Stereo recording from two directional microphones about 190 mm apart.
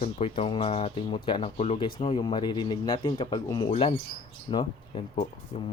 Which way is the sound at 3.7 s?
30° left (ahead or behind).